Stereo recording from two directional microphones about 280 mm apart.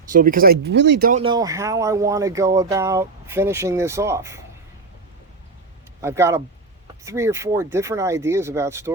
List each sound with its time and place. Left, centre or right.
0.1 s speech: right
1.2 s speech: centre
6.0 s speech: centre